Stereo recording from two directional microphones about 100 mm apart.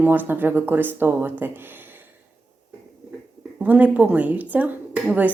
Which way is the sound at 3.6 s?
15° right (ahead or behind).